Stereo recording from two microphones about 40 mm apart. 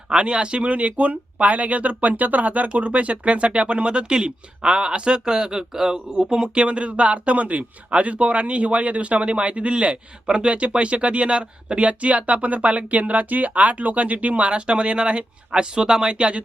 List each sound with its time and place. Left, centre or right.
0.2 s speech: right